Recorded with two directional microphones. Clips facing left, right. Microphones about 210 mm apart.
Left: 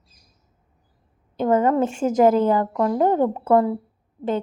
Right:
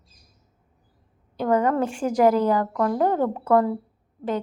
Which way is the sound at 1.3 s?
25° left (ahead or behind).